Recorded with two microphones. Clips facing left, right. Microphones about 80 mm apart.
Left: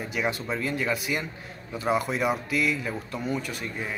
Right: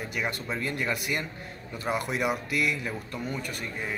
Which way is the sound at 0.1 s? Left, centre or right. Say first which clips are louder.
Left 5 dB; centre.